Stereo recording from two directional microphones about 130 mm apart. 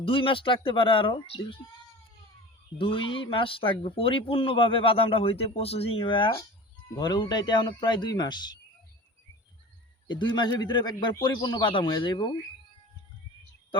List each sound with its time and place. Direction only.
0.0 s speech: 45° left (ahead or behind)
2.7 s speech: 45° left (ahead or behind)
10.1 s speech: 40° left (ahead or behind)